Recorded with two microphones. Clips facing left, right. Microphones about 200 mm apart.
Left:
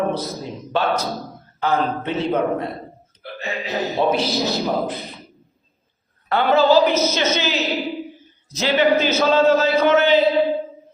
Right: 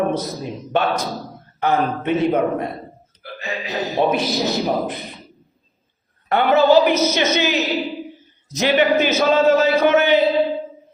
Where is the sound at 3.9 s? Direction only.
20° right (ahead or behind).